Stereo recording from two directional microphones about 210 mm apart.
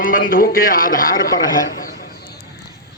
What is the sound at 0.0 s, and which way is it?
A man's voice, 40° left (ahead or behind).